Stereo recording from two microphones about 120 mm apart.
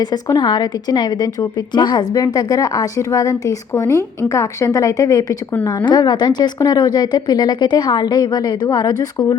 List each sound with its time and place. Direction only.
0.0 s a woman's voice: 35° left (ahead or behind)